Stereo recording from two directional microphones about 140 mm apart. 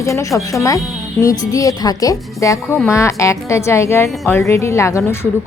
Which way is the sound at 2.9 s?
20° left (ahead or behind).